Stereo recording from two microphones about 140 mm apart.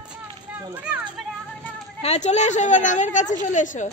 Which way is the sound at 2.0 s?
50° left (ahead or behind).